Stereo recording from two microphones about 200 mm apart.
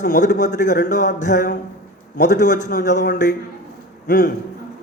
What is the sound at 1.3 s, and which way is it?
Speech, 55° left (ahead or behind).